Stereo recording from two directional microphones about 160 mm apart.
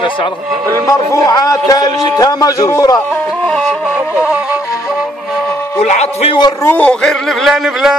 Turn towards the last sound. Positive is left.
turn(degrees=0)  # may be behind; listen again after turning